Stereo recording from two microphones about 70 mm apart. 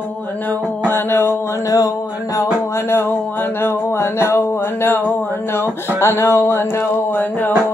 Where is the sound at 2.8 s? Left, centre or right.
Left.